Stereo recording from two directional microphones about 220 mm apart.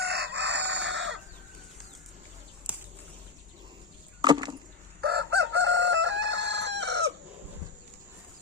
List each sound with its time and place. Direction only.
0.0 s chicken: 50° right (ahead or behind)
4.2 s chop: 20° right (ahead or behind)
4.9 s chicken: 50° right (ahead or behind)